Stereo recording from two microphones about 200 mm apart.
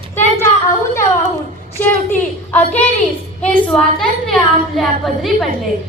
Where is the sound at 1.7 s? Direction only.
10° left (ahead or behind).